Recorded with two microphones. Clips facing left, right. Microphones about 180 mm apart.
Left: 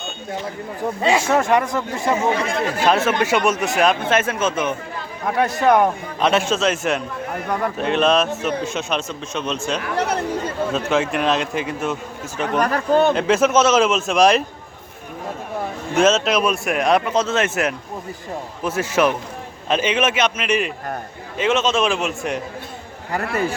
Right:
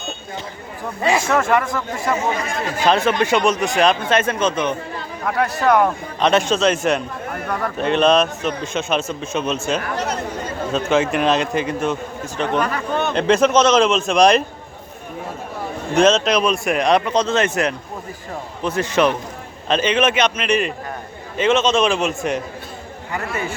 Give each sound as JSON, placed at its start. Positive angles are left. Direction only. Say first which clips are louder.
{"t": 1.0, "sound": "speech", "louder": "even", "side_deg": 20}
{"t": 2.8, "sound": "speech", "louder": "right 2 dB", "side_deg": 5}
{"t": 5.4, "sound": "speech", "louder": "left 1 dB", "side_deg": 20}
{"t": 6.1, "sound": "speech", "louder": "right 2 dB", "side_deg": 5}
{"t": 12.5, "sound": "speech", "louder": "left 6 dB", "side_deg": 40}
{"t": 13.1, "sound": "speech", "louder": "right 1 dB", "side_deg": 5}
{"t": 16.0, "sound": "speech", "louder": "right 1 dB", "side_deg": 5}
{"t": 23.1, "sound": "speech", "louder": "left 3 dB", "side_deg": 40}